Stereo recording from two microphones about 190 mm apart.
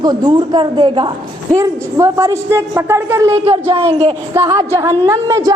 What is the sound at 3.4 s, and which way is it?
Speech, 35° right (ahead or behind).